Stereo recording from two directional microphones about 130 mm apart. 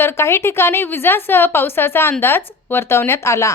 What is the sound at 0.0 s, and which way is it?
A woman's voice, 20° left (ahead or behind).